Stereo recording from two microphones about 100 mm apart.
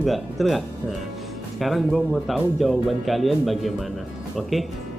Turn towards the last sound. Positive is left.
turn(degrees=0)  # may be behind; listen again after turning